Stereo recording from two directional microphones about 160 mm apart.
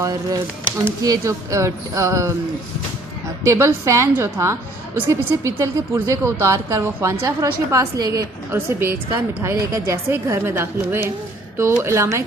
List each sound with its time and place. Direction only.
0.0 s a woman's voice: 20° right (ahead or behind)
3.4 s a woman's voice: 20° right (ahead or behind)